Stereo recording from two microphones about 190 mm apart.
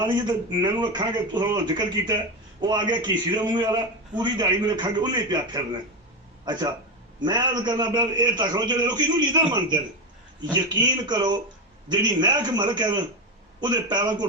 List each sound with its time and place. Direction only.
0.0 s speech: 25° right (ahead or behind)